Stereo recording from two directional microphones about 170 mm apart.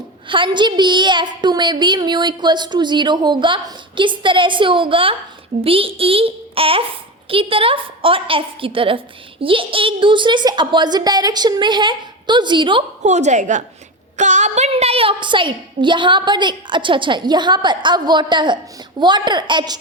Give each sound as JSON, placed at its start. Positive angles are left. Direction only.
{"t": 0.3, "sound": "a woman's voice", "side_deg": -30}
{"t": 13.0, "sound": "a woman's voice", "side_deg": -45}